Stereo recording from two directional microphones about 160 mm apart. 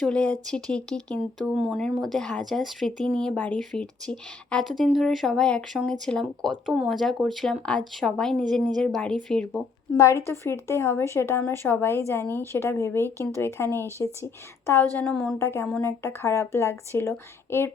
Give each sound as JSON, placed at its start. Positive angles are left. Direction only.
{"t": 0.0, "sound": "speech", "side_deg": 5}
{"t": 10.0, "sound": "speech", "side_deg": 15}
{"t": 14.9, "sound": "speech", "side_deg": 5}
{"t": 15.4, "sound": "speech", "side_deg": 15}